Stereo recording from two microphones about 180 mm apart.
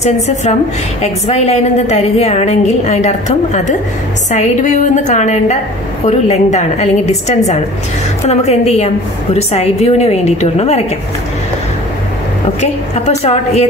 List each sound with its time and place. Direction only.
0.0 s a woman's voice: 40° left (ahead or behind)
13.2 s a woman's voice: 35° left (ahead or behind)